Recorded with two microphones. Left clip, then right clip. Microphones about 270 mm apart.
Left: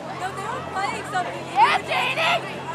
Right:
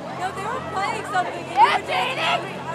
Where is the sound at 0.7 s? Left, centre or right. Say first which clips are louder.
Right 2 dB; right.